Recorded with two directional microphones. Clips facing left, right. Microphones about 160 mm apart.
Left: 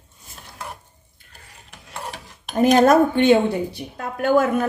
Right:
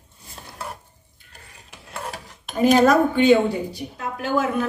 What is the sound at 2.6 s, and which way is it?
A woman's voice, 50° left (ahead or behind).